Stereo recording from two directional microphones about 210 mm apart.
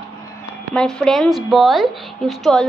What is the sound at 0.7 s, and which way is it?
A woman's voice, 5° left (ahead or behind).